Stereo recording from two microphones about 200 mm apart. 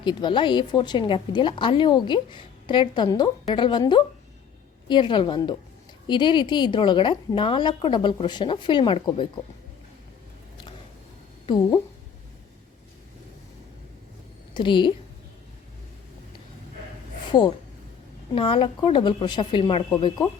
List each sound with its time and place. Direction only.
0.0 s a woman's voice: 25° left (ahead or behind)
11.4 s a woman's voice: 20° left (ahead or behind)
14.5 s a woman's voice: 25° left (ahead or behind)
17.3 s a woman's voice: 20° left (ahead or behind)